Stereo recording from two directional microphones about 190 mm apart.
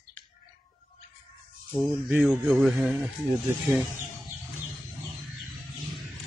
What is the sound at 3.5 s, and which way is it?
Speech, 15° right (ahead or behind).